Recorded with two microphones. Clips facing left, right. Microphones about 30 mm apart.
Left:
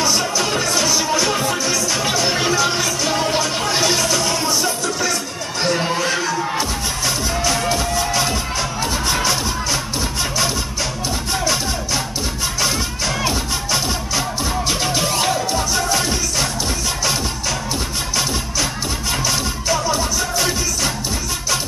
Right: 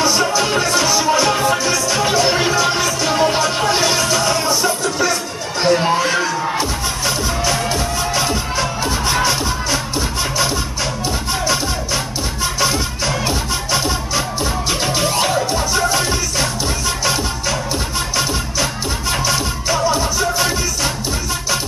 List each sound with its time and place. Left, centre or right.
0.0 s music: centre
11.4 s music: centre